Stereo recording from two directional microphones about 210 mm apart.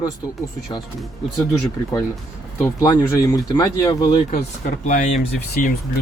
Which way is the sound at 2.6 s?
20° left (ahead or behind).